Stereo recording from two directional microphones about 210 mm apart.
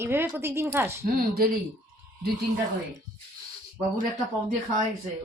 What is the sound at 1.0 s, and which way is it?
Speech, 45° right (ahead or behind).